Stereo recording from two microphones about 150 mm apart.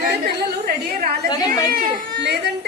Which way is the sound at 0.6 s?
75° right (ahead or behind).